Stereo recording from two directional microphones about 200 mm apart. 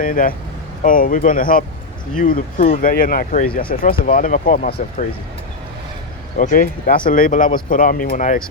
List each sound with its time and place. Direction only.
0.0 s speech: 45° left (ahead or behind)
6.3 s speech: 45° left (ahead or behind)